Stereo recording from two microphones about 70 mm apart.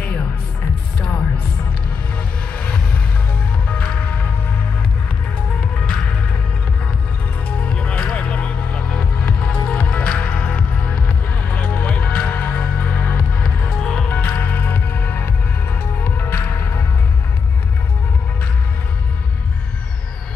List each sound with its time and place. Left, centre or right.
2.5 s a sound: centre
5.6 s music: centre
7.4 s music: centre
13.7 s music: centre
14.1 s music: left